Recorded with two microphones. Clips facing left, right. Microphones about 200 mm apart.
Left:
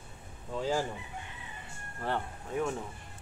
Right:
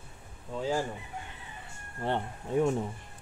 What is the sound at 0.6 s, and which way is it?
Speech, centre (ahead or behind).